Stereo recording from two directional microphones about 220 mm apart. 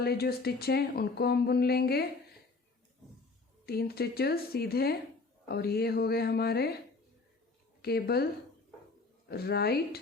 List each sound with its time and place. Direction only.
0.0 s speech: 45° left (ahead or behind)
3.7 s speech: 45° left (ahead or behind)
7.8 s speech: 45° left (ahead or behind)
9.3 s speech: 45° left (ahead or behind)